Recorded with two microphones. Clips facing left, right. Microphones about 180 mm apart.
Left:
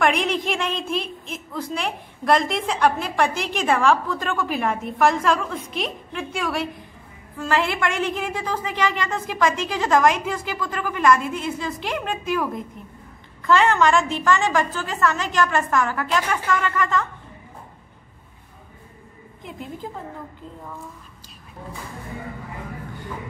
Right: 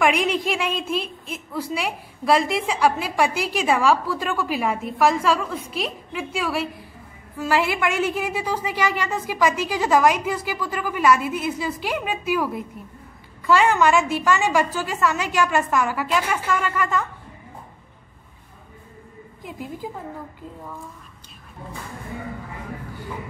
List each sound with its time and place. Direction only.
0.0 s a woman's voice: 5° right (ahead or behind)
19.4 s a woman's voice: centre (ahead or behind)